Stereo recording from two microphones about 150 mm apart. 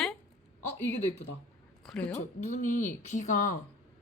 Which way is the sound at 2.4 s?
55° left (ahead or behind).